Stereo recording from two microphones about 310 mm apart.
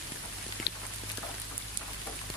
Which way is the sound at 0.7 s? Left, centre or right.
Left.